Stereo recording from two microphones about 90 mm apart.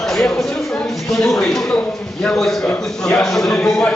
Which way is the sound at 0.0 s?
5° left (ahead or behind).